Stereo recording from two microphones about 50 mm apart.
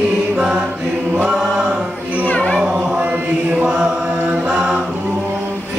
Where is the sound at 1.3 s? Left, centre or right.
Centre.